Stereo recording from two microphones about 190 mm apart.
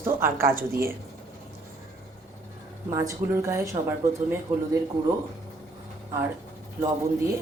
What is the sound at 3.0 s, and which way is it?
Speech, 15° right (ahead or behind).